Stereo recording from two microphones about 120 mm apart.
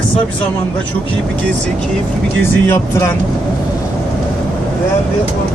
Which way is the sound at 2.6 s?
20° left (ahead or behind).